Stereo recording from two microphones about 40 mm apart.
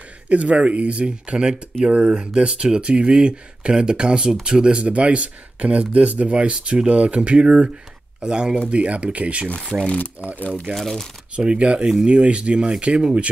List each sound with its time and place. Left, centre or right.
0.3 s speech: right; by 8.6 s centre
8.6 s speech: right
9.9 s speech: left
10.7 s speech: centre
11.3 s speech: right